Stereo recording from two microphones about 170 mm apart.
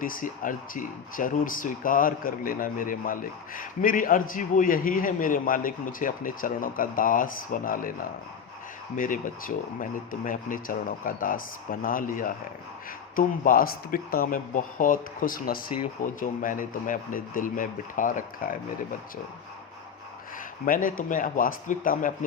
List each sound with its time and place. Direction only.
0.0 s speech: 55° left (ahead or behind)
9.0 s speech: 50° left (ahead or behind)
20.7 s speech: 55° left (ahead or behind)